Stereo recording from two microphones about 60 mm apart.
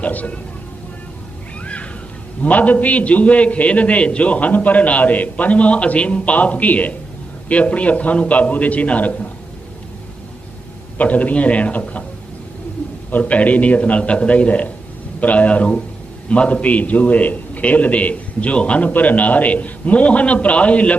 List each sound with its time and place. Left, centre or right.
0.0 s a man's voice: left
1.6 s a sound: left
2.4 s a man's voice: left
10.9 s a man's voice: left
13.1 s a man's voice: left